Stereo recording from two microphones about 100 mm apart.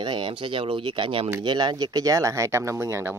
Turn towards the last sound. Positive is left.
turn(degrees=-25)  # may be behind; listen again after turning